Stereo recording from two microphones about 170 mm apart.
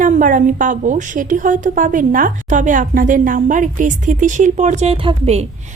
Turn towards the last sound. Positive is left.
turn(degrees=-35)  # may be behind; listen again after turning